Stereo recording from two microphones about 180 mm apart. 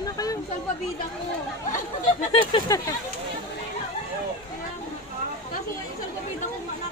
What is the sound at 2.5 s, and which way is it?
Speech, 20° left (ahead or behind).